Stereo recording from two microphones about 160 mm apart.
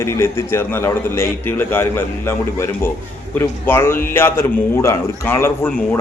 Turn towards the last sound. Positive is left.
turn(degrees=10)  # may be behind; listen again after turning